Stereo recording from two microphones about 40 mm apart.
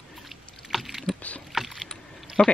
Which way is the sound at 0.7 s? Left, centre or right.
Centre.